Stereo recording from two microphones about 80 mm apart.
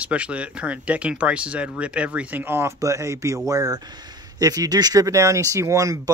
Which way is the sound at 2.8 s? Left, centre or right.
Right.